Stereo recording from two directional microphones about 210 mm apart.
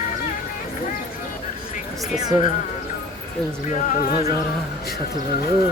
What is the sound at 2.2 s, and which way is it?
Speech, 20° right (ahead or behind).